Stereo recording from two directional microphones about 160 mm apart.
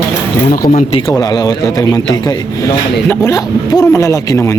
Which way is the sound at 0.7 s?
40° left (ahead or behind).